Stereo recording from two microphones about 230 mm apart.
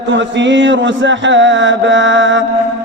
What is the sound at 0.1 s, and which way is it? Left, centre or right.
Mantra, right.